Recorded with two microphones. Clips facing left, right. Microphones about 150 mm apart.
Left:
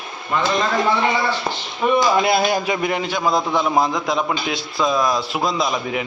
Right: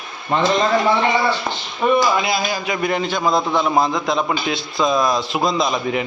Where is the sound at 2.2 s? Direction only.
55° left (ahead or behind).